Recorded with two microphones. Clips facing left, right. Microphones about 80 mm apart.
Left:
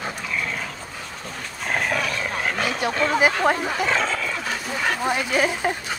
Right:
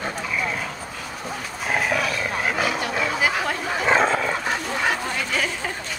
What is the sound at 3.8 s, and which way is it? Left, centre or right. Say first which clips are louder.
Dog: right 4 dB; right.